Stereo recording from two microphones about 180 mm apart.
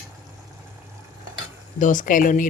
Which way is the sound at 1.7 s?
45° left (ahead or behind).